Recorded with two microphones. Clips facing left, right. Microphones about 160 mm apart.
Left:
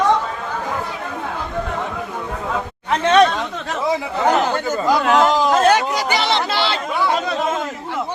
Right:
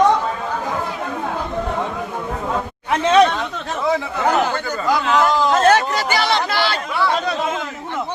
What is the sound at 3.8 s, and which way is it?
Chatter, 20° left (ahead or behind).